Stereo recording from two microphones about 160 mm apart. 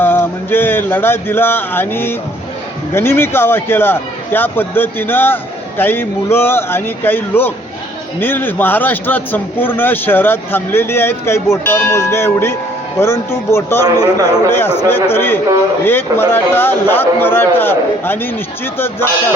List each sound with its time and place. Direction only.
0.0 s a man's voice: 15° left (ahead or behind)